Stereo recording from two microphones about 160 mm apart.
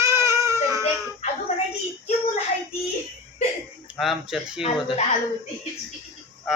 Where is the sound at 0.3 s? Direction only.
20° right (ahead or behind).